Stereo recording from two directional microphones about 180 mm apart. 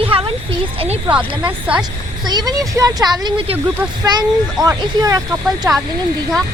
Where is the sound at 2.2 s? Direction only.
20° right (ahead or behind).